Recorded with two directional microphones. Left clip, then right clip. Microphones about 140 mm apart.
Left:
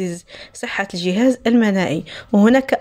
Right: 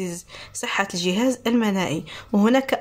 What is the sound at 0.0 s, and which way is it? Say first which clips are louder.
A woman's voice: left 5 dB; 30° left (ahead or behind).